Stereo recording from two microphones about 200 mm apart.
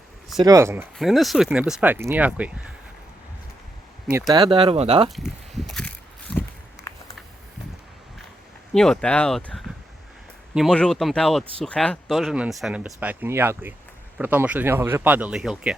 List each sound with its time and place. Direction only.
0.4 s speech: 15° right (ahead or behind)
0.9 s speech: centre (ahead or behind)
4.3 s speech: 25° right (ahead or behind)
5.0 s a sound: centre (ahead or behind)
6.9 s a sound: 15° left (ahead or behind)
8.7 s speech: 5° left (ahead or behind)